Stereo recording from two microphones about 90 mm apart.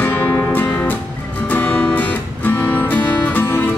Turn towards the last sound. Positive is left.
turn(degrees=20)  # may be behind; listen again after turning